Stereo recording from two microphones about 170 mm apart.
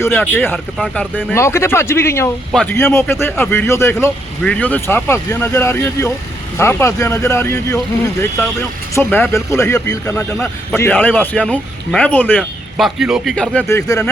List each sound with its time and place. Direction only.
0.0 s a man's voice: 10° left (ahead or behind)
0.5 s speech: centre (ahead or behind)
1.1 s a man's voice: 15° left (ahead or behind)
2.5 s speech: centre (ahead or behind)
2.7 s a man's voice: 15° left (ahead or behind)
9.0 s a man's voice: 10° left (ahead or behind)
12.4 s speech: 5° right (ahead or behind)
13.7 s a man's voice: 20° left (ahead or behind)